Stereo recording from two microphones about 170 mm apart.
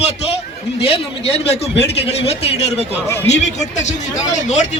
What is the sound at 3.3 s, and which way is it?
Speech, 45° left (ahead or behind).